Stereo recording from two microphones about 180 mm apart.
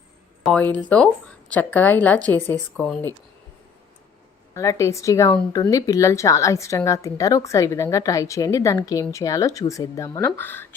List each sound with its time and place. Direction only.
0.4 s a woman's voice: 5° left (ahead or behind)
4.5 s a woman's voice: 15° left (ahead or behind)